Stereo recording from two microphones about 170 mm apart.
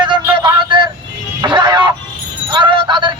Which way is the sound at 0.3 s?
30° right (ahead or behind).